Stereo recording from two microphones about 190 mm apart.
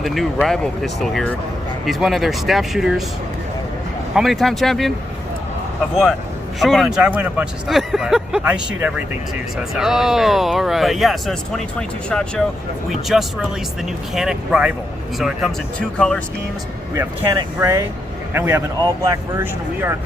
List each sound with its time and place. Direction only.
0.0 s speech: centre (ahead or behind)
4.1 s speech: centre (ahead or behind)
6.6 s speech: centre (ahead or behind)
16.0 s speech: 5° left (ahead or behind)
17.6 s speech: 15° right (ahead or behind)